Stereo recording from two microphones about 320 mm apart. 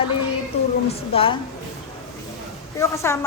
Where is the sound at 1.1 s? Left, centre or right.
Centre.